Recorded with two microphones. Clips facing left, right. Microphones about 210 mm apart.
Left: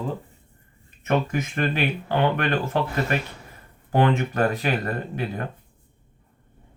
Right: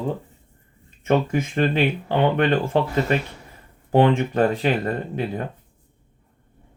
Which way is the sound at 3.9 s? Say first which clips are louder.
Right 4 dB; 25° right (ahead or behind).